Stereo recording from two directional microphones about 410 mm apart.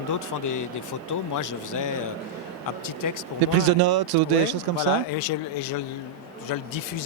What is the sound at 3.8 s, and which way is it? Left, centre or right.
Speech, right.